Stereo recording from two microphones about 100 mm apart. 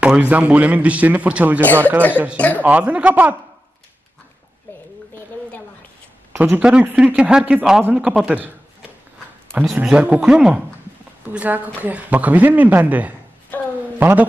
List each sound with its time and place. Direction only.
0.0 s a man's voice: 15° right (ahead or behind)
2.3 s speech: 15° left (ahead or behind)
2.6 s a man's voice: 15° right (ahead or behind)
6.5 s a man's voice: 15° right (ahead or behind)
9.7 s a man's voice: 10° right (ahead or behind)
13.5 s a sound: 15° left (ahead or behind)
13.9 s a man's voice: 20° right (ahead or behind)